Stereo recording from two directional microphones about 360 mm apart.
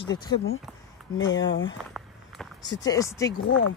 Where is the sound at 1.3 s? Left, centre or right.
Left.